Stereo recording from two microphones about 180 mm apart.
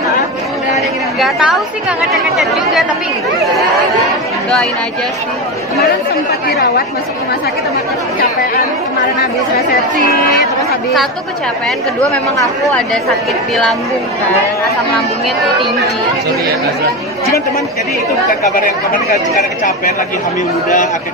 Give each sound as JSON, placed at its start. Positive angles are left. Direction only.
{"t": 1.2, "sound": "a woman's voice", "side_deg": 0}
{"t": 18.4, "sound": "speech", "side_deg": 45}